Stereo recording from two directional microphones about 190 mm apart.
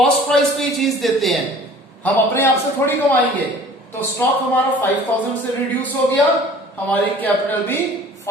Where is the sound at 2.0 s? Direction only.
10° left (ahead or behind).